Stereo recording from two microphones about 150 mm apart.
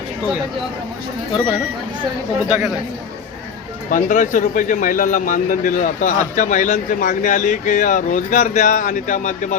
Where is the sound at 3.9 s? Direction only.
60° left (ahead or behind).